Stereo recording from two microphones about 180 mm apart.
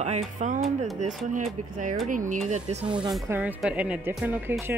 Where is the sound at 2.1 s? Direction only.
45° right (ahead or behind).